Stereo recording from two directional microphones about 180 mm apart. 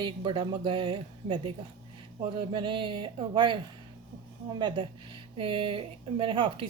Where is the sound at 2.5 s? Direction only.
25° right (ahead or behind).